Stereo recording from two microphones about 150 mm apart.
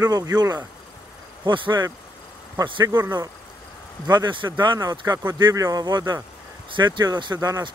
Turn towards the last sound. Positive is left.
turn(degrees=-25)  # may be behind; listen again after turning